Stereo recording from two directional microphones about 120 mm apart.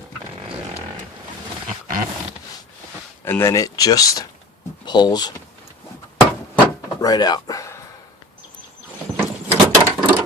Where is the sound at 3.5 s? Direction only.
30° left (ahead or behind).